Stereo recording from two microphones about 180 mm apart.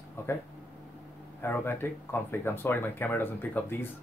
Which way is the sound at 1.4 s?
10° left (ahead or behind).